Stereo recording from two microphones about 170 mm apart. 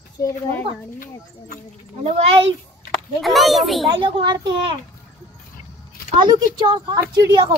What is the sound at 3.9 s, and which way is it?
Speech, 30° right (ahead or behind).